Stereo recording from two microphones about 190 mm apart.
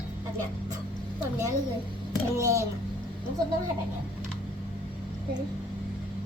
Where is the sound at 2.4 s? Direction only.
15° right (ahead or behind).